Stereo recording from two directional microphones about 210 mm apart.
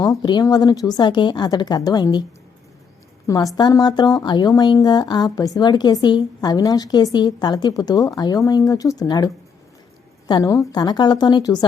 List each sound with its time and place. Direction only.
0.0 s a woman's voice: 20° left (ahead or behind)
3.2 s a woman's voice: 15° left (ahead or behind)